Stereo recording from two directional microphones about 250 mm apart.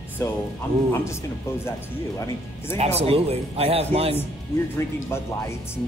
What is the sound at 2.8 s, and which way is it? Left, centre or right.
Speech, right.